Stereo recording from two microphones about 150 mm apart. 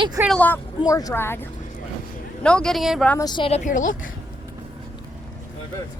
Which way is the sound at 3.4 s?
50° left (ahead or behind).